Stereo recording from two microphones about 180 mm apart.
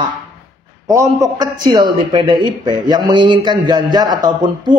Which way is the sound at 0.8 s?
15° right (ahead or behind).